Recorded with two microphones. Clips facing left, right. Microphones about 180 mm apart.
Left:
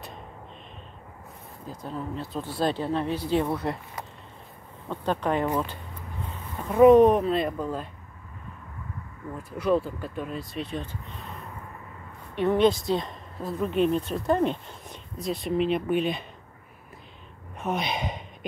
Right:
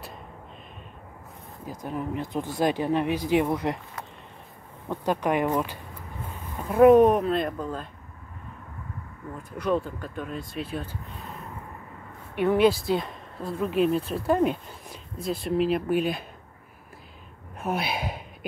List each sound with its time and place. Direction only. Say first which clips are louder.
1.7 s speech: right 3 dB; 15° right (ahead or behind)
4.8 s speech: right 1 dB; 10° right (ahead or behind); by 7.9 s 5° left (ahead or behind)
9.4 s speech: left 2 dB; 5° left (ahead or behind)
17.6 s speech: even; 5° right (ahead or behind)